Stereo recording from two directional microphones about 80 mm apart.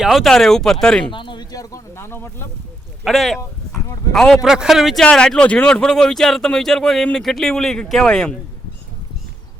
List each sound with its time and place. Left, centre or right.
0.0 s speech: centre
1.1 s a sound: left
1.5 s speech: left
2.0 s speech: left
3.0 s speech: centre
4.4 s speech: centre
5.0 s speech: centre